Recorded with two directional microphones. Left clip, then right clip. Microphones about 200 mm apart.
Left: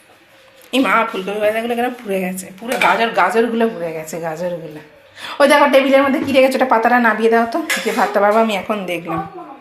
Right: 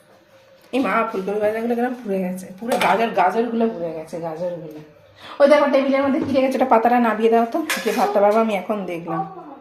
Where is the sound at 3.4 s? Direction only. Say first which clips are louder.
Left 5 dB; 10° left (ahead or behind).